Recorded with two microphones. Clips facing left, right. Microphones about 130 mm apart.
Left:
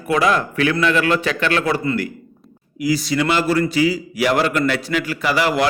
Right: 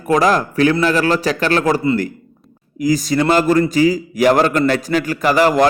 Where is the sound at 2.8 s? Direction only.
45° right (ahead or behind).